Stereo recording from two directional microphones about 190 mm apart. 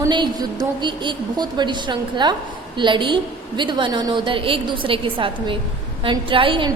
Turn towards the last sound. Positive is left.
turn(degrees=-25)  # may be behind; listen again after turning